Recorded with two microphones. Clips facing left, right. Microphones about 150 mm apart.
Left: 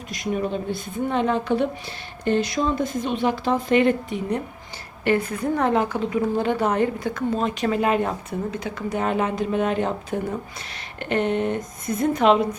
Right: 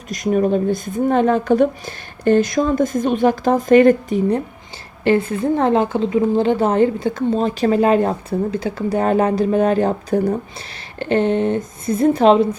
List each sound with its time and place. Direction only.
0.1 s speech: 45° right (ahead or behind)
5.0 s a woman's voice: 25° right (ahead or behind)